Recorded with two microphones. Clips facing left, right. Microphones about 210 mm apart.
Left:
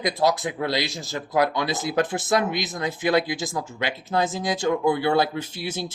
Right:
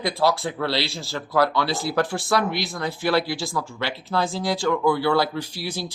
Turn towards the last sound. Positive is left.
turn(degrees=20)  # may be behind; listen again after turning